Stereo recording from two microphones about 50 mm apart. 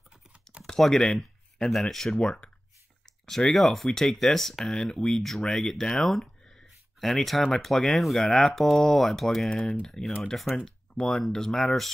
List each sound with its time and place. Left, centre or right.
0.7 s speech: centre
6.0 s a sound: centre
7.5 s speech: centre
9.5 s speech: left; by 11.9 s centre